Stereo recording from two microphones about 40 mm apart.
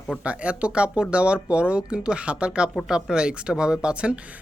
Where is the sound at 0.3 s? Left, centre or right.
Right.